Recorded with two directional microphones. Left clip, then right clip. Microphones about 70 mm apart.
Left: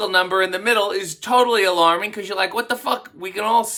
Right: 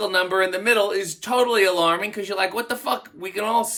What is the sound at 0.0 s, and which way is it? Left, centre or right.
Speech, left.